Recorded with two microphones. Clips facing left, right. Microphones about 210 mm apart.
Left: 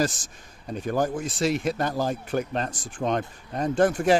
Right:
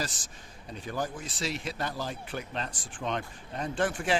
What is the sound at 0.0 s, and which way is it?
Speech, 45° left (ahead or behind).